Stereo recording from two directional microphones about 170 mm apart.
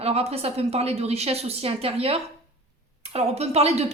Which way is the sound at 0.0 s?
35° right (ahead or behind).